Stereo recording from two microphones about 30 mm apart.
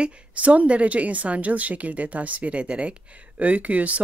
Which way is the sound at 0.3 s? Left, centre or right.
Right.